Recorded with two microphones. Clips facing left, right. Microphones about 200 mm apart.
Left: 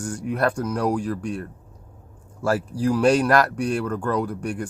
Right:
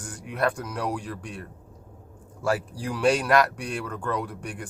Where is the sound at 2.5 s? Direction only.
40° left (ahead or behind).